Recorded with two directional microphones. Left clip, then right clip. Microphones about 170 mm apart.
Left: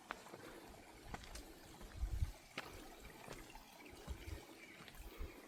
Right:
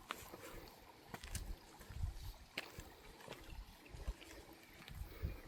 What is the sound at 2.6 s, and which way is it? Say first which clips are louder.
Water: right 2 dB; 80° right.